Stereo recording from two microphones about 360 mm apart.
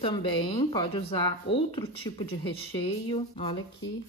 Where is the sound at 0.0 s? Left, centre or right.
Centre.